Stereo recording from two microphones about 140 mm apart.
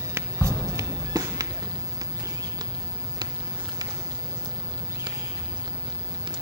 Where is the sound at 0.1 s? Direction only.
20° right (ahead or behind).